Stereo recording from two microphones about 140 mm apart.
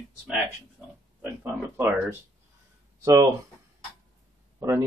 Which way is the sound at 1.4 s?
10° right (ahead or behind).